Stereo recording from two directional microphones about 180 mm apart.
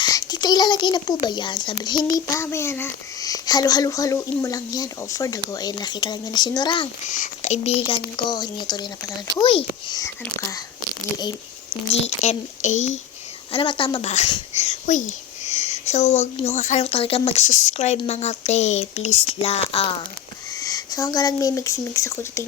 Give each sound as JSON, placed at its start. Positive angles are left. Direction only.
{"t": 0.0, "sound": "speech", "side_deg": 20}
{"t": 7.1, "sound": "speech", "side_deg": 45}
{"t": 8.1, "sound": "speech", "side_deg": 25}
{"t": 12.0, "sound": "speech", "side_deg": 40}
{"t": 13.5, "sound": "speech", "side_deg": 30}
{"t": 20.6, "sound": "speech", "side_deg": 20}